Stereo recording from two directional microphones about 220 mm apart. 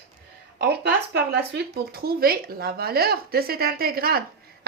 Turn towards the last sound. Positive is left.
turn(degrees=-45)  # may be behind; listen again after turning